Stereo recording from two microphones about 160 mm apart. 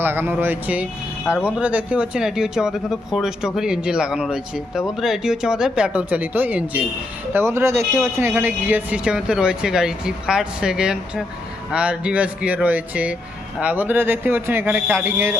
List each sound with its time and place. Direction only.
0.0 s speech: 15° right (ahead or behind)